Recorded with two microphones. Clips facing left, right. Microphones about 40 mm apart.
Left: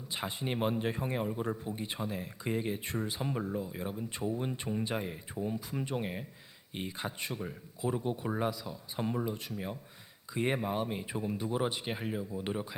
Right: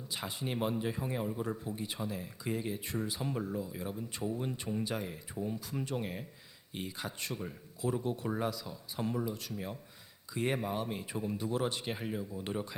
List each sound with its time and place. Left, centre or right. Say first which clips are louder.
0.1 s speech: left 2 dB; left
3.2 s speech: left 1 dB; centre